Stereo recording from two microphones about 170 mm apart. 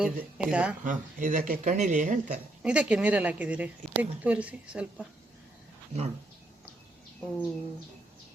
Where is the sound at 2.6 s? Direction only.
5° right (ahead or behind).